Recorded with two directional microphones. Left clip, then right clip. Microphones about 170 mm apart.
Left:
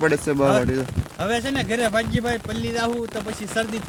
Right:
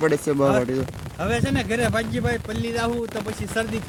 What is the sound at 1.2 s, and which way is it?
Speech, 15° left (ahead or behind).